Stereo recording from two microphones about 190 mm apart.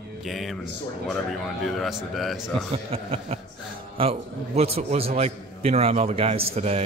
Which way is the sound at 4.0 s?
30° right (ahead or behind).